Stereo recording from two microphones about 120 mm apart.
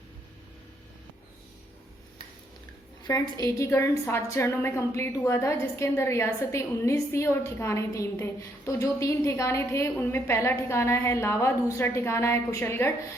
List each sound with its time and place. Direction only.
3.0 s a woman's voice: 30° left (ahead or behind)